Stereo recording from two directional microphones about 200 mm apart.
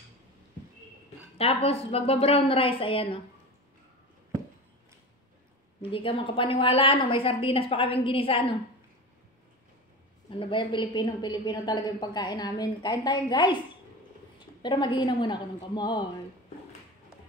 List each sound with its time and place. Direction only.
1.4 s a woman's voice: 30° left (ahead or behind)
5.8 s a woman's voice: 25° left (ahead or behind)
10.4 s a woman's voice: 25° left (ahead or behind)
14.6 s a woman's voice: 25° left (ahead or behind)